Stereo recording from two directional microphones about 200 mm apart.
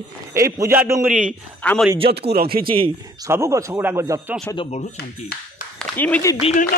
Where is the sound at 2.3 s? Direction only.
50° right (ahead or behind).